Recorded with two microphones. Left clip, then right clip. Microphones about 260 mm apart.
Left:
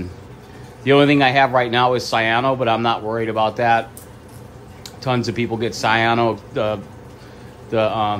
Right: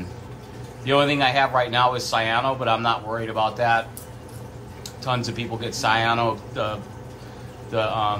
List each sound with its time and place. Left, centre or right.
0.8 s a man's voice: left
5.0 s a man's voice: left